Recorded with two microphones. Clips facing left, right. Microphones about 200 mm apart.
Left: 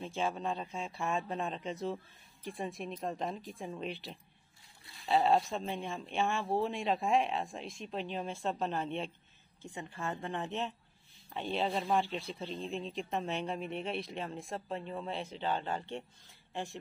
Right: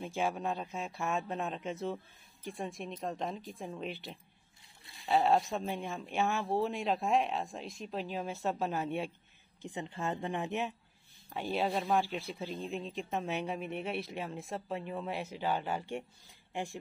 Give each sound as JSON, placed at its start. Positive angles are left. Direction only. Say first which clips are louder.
{"t": 0.0, "sound": "speech", "louder": "right 1 dB", "side_deg": -10}
{"t": 9.6, "sound": "speech", "louder": "right 3 dB", "side_deg": -20}